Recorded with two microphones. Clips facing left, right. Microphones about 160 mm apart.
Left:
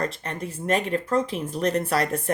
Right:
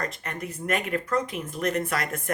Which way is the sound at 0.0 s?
30° left (ahead or behind).